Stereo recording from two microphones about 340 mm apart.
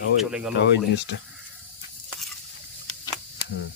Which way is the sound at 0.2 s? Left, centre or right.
Centre.